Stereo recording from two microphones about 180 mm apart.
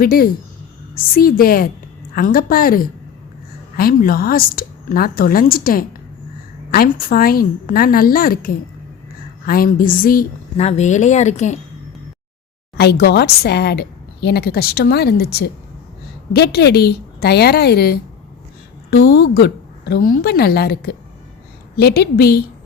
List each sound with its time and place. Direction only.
0.0 s a woman's voice: 55° left (ahead or behind)
10.6 s a woman's voice: 35° left (ahead or behind)
12.7 s a woman's voice: 65° left (ahead or behind)